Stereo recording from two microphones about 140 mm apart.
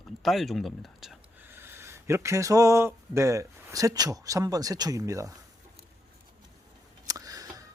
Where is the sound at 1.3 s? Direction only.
15° right (ahead or behind).